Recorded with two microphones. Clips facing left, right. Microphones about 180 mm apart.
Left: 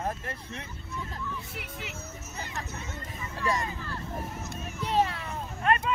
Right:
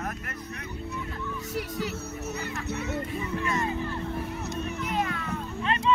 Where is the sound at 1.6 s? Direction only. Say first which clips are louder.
Right 9 dB; 40° right (ahead or behind).